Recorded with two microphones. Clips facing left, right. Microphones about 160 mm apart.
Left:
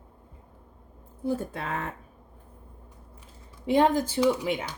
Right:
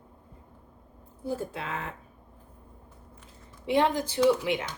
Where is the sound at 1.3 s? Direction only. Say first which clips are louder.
Left 3 dB; 50° left (ahead or behind).